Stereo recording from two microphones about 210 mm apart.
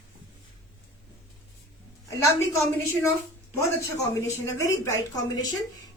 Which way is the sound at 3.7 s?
15° left (ahead or behind).